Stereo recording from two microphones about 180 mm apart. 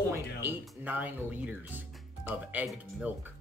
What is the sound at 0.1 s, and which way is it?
Speech, 10° right (ahead or behind).